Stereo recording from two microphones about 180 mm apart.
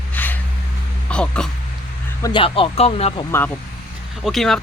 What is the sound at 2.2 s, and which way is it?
Speech, 30° left (ahead or behind).